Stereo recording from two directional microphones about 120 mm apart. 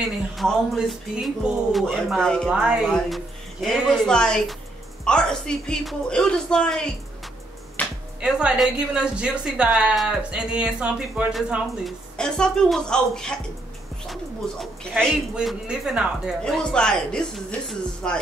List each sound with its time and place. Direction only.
0.0 s music: centre (ahead or behind)
2.5 s a woman's voice: 10° right (ahead or behind)
3.6 s music: 5° left (ahead or behind)
5.0 s speech: 5° left (ahead or behind)
7.8 s music: 10° left (ahead or behind)
8.2 s a woman's voice: 10° right (ahead or behind)
12.2 s music: 5° left (ahead or behind)
16.4 s music: 5° left (ahead or behind)